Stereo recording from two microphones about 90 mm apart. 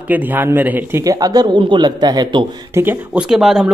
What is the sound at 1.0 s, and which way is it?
Speech, 45° right (ahead or behind).